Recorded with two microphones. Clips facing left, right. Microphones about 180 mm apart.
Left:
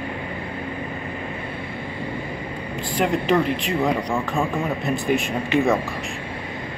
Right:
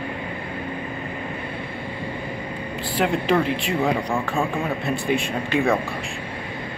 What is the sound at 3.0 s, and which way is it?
Speech, centre (ahead or behind).